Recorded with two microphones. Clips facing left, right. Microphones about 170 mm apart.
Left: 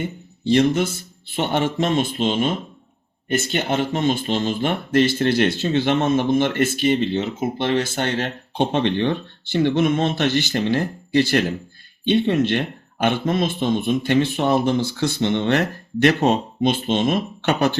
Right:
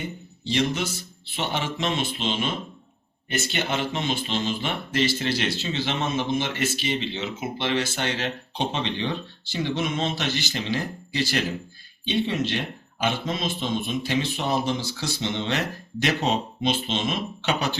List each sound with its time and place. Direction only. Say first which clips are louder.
0.4 s speech: left 8 dB; 50° left (ahead or behind)